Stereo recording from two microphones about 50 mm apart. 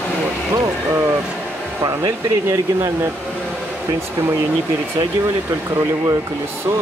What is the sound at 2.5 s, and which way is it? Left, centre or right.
Speech, right.